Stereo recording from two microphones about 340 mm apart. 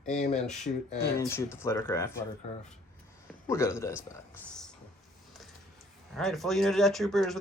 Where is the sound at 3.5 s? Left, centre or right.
Centre.